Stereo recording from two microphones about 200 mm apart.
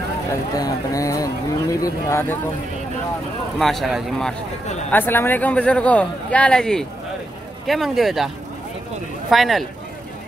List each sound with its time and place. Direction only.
0.3 s speech: 15° left (ahead or behind)
3.5 s a man's voice: centre (ahead or behind)
9.3 s a man's voice: centre (ahead or behind)